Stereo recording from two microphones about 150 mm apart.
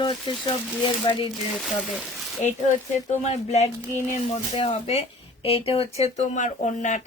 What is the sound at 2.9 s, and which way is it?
Speech, 50° left (ahead or behind).